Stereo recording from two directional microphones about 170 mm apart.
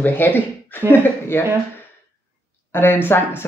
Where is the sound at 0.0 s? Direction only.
10° left (ahead or behind).